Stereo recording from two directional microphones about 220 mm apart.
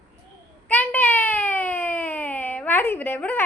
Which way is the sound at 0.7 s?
5° left (ahead or behind).